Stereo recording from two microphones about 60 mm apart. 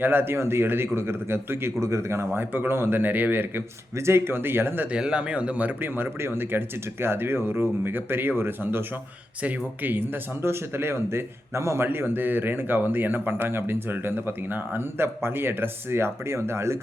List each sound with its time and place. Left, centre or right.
0.0 s speech: right
2.3 s speech: right
3.9 s speech: right
4.9 s speech: centre; by 11.9 s right
11.9 s speech: right